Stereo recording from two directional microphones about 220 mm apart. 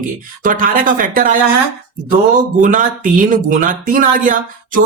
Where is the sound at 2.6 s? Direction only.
35° right (ahead or behind).